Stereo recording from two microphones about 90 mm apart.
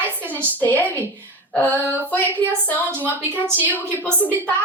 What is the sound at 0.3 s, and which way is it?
Speech, 25° right (ahead or behind).